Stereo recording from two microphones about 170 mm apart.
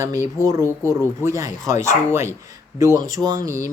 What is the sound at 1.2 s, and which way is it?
Speech, 20° right (ahead or behind).